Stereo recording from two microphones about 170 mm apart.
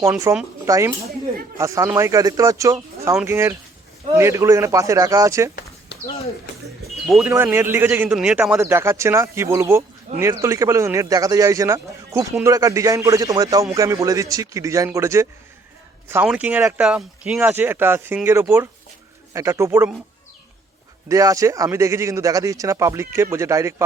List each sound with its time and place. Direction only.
0.0 s speech: 15° right (ahead or behind)
5.9 s a sound: 90° left
7.1 s speech: 10° right (ahead or behind)
8.5 s speech: 15° right (ahead or behind)
21.1 s speech: 20° right (ahead or behind)